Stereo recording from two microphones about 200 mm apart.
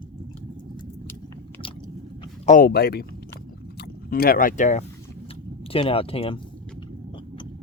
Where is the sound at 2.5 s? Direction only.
45° left (ahead or behind); by 6.4 s 30° left (ahead or behind).